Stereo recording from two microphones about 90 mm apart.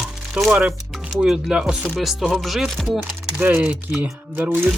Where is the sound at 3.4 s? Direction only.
25° right (ahead or behind).